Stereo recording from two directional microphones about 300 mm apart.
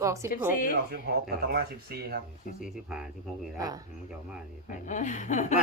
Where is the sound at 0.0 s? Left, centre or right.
Centre.